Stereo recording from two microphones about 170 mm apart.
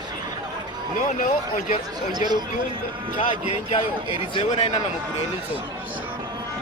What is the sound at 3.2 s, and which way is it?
Speech, 40° left (ahead or behind).